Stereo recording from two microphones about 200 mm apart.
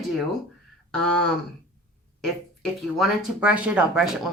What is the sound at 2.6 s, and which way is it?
Speech, centre (ahead or behind).